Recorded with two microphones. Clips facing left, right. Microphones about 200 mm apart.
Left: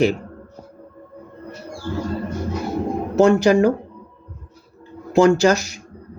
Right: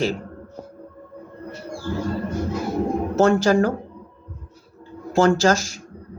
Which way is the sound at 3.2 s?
10° left (ahead or behind).